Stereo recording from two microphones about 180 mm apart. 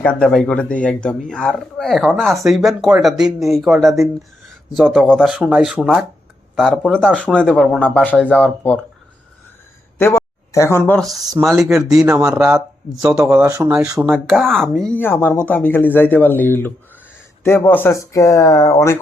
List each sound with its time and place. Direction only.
0.0 s speech: 5° left (ahead or behind)
10.0 s speech: 15° left (ahead or behind)
11.4 s speech: centre (ahead or behind)
12.4 s speech: 20° right (ahead or behind)
13.1 s speech: 5° right (ahead or behind); by 18.9 s 15° left (ahead or behind)